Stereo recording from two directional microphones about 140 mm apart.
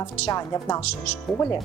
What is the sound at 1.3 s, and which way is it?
Speech, centre (ahead or behind).